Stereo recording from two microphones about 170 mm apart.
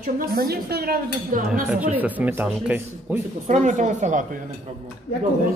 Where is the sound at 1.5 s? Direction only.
10° right (ahead or behind).